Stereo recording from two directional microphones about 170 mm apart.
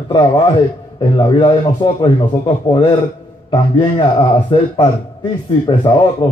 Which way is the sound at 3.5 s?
30° left (ahead or behind).